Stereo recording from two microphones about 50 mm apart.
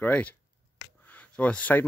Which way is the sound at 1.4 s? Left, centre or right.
Left.